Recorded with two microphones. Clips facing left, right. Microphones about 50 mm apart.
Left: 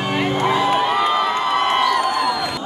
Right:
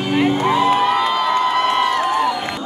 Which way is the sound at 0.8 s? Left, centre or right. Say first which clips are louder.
Right 1 dB; centre.